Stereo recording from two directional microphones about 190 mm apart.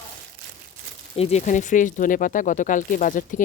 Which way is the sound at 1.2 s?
35° left (ahead or behind).